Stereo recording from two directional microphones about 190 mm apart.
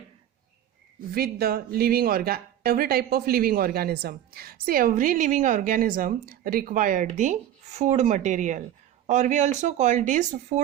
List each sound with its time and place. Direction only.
1.1 s speech: 55° right (ahead or behind)